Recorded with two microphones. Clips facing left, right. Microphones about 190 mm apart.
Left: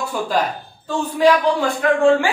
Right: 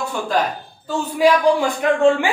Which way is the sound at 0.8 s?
10° right (ahead or behind).